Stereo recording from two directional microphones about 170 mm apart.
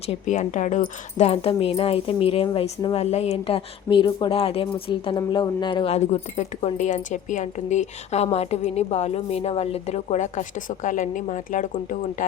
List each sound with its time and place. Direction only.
0.1 s a woman's voice: 45° left (ahead or behind)